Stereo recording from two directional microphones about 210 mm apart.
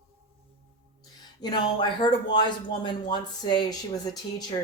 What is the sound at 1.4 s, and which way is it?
Speech, 20° left (ahead or behind).